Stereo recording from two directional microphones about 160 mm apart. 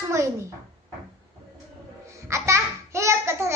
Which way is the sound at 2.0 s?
20° right (ahead or behind).